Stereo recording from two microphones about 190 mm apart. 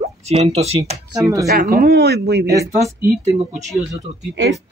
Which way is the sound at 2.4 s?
15° right (ahead or behind).